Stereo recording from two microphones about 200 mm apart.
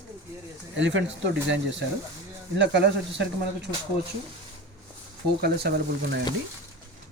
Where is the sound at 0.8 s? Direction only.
65° right (ahead or behind).